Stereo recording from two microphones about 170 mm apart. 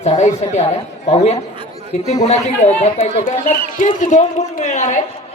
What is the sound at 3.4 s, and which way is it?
A man's voice, 50° left (ahead or behind).